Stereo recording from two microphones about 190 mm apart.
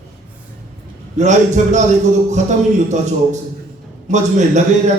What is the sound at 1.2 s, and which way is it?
Speech, 40° right (ahead or behind).